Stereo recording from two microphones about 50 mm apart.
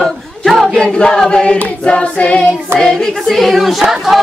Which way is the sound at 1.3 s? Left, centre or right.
Centre.